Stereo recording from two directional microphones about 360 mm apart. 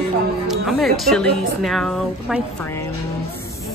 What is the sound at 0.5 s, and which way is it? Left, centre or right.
Speech, centre.